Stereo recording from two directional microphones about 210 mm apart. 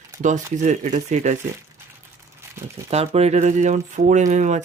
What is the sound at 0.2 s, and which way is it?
Speech, 35° right (ahead or behind).